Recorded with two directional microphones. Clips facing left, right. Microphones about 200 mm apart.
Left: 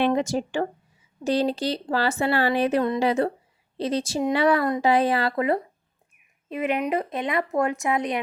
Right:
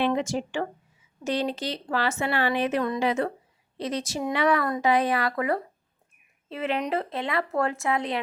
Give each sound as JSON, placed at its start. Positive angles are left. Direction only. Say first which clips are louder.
{"t": 0.0, "sound": "a woman's voice", "louder": "left 3 dB", "side_deg": 40}